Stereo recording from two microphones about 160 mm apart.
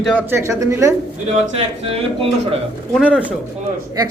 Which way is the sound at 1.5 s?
35° right (ahead or behind).